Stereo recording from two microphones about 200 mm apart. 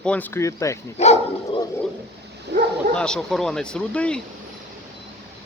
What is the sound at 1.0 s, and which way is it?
Dog, 35° left (ahead or behind).